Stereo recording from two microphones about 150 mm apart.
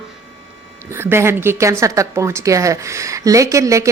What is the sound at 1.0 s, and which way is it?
A woman's voice, 15° right (ahead or behind).